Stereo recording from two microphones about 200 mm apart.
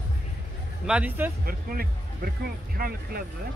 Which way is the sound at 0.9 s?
5° right (ahead or behind).